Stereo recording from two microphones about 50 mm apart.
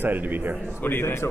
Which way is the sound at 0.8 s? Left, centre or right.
Left.